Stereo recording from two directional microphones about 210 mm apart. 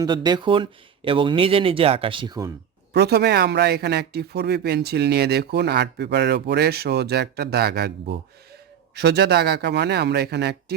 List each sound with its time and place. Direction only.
0.0 s speech: 20° right (ahead or behind)
2.9 s speech: 50° right (ahead or behind)